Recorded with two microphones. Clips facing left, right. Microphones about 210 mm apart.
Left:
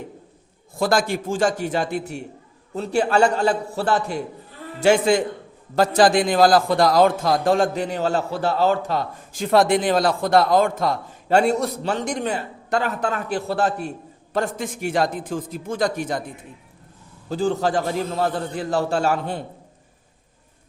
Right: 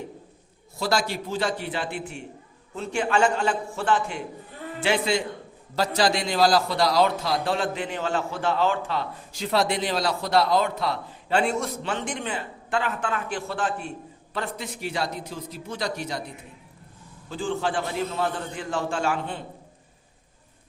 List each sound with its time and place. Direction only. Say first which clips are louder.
0.8 s a man's voice: left 5 dB; 50° left (ahead or behind)
17.2 s a man's voice: left 6 dB; 40° left (ahead or behind)